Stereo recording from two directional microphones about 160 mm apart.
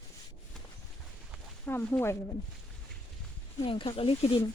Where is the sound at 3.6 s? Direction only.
35° left (ahead or behind).